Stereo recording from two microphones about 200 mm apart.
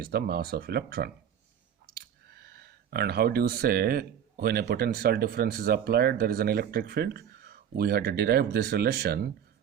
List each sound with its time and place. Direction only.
0.0 s speech: 50° right (ahead or behind)
2.5 s speech: 50° right (ahead or behind)